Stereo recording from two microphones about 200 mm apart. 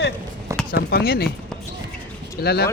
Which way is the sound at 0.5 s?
15° right (ahead or behind).